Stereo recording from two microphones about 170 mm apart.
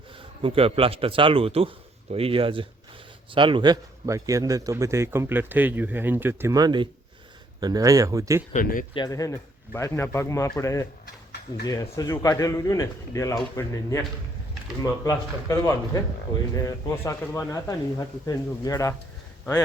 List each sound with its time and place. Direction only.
0.4 s a man's voice: 35° right (ahead or behind)
8.5 s speech: 55° left (ahead or behind)
8.9 s a man's voice: 25° left (ahead or behind)
11.0 s a sound: 70° left (ahead or behind)
11.6 s speech: 20° left (ahead or behind)
15.0 s speech: 20° left (ahead or behind)